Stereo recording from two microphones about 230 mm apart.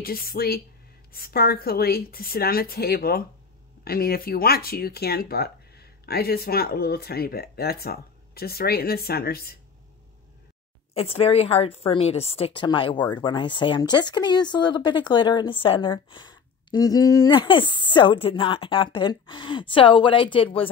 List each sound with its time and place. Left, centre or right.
0.0 s speech: left
11.0 s speech: left